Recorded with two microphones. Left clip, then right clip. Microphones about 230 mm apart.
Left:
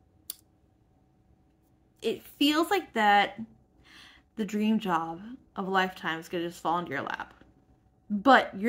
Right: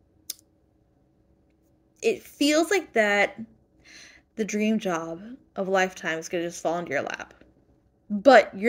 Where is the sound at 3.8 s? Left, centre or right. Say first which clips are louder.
Right 4 dB; left.